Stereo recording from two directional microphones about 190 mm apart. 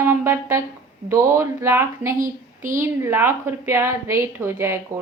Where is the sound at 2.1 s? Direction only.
45° right (ahead or behind).